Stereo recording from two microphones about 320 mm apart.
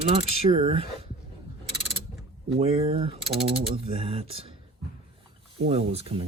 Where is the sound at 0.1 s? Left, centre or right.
Centre.